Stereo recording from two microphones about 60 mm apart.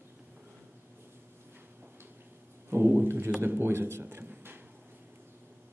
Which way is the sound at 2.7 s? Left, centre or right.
Right.